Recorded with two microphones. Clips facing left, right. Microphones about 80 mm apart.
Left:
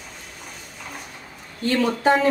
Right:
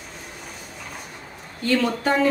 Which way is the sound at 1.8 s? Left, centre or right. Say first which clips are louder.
Left 3 dB; centre.